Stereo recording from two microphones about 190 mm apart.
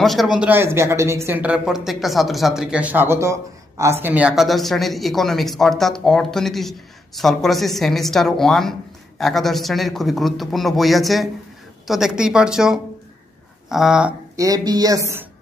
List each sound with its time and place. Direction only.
0.0 s speech: centre (ahead or behind)
14.3 s speech: 20° right (ahead or behind)